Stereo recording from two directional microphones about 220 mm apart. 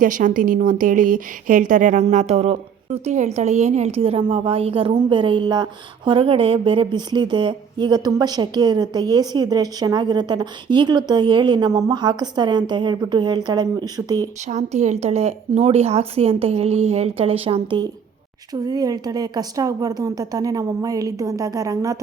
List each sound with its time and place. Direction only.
0.0 s a woman's voice: 35° right (ahead or behind); by 14.3 s 15° right (ahead or behind)
14.4 s a woman's voice: 30° right (ahead or behind); by 21.9 s 15° right (ahead or behind)